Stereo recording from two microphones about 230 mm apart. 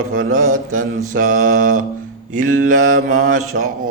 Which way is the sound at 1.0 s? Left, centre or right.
Right.